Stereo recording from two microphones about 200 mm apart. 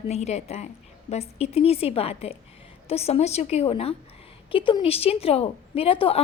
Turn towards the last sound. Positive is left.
turn(degrees=25)  # may be behind; listen again after turning